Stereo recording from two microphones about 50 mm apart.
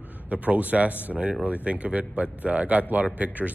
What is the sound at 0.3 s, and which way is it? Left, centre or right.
A man's voice, right.